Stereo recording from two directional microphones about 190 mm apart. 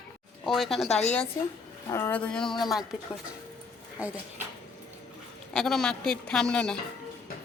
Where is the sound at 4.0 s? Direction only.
10° right (ahead or behind).